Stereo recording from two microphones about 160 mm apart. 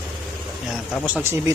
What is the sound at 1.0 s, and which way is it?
Speech, 15° right (ahead or behind).